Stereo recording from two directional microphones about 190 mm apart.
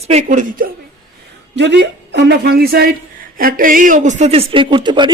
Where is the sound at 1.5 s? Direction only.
65° right (ahead or behind).